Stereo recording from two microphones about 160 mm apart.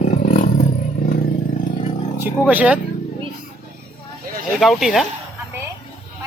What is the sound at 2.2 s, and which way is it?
Speech, 10° right (ahead or behind).